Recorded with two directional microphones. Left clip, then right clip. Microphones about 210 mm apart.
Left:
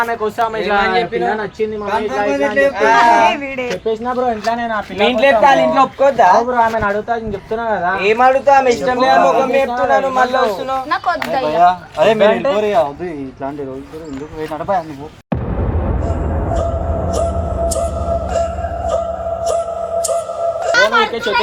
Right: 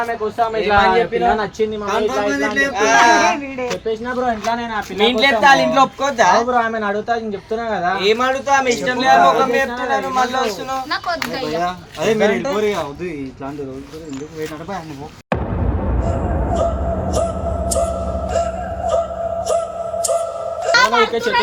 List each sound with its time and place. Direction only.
0.1 s speech: 35° left (ahead or behind)
0.7 s speech: 5° right (ahead or behind)
1.4 s speech: 15° right (ahead or behind)
3.8 s speech: centre (ahead or behind)
5.2 s a man's voice: 45° right (ahead or behind); by 7.9 s 15° right (ahead or behind)
7.9 s a man's voice: 35° right (ahead or behind)
11.4 s speech: 25° right (ahead or behind)
16.6 s a sound: centre (ahead or behind)
18.3 s music: centre (ahead or behind)
20.7 s a sound: 50° right (ahead or behind)